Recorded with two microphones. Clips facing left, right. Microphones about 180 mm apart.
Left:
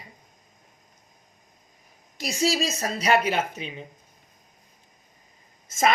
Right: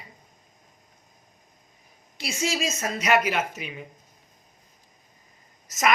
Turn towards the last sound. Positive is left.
turn(degrees=30)  # may be behind; listen again after turning